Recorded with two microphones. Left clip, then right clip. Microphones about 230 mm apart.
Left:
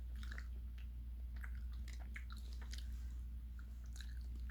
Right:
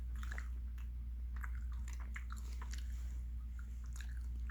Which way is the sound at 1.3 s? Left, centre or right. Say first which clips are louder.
Right 5 dB; centre.